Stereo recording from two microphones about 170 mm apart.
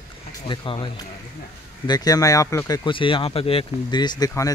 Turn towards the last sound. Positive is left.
turn(degrees=20)  # may be behind; listen again after turning